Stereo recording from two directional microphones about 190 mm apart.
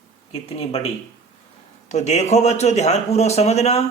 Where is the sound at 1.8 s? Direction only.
35° left (ahead or behind).